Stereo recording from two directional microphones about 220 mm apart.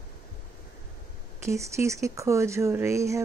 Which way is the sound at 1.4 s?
15° right (ahead or behind).